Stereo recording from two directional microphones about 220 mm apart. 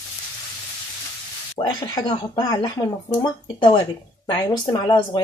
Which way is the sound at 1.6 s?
20° left (ahead or behind).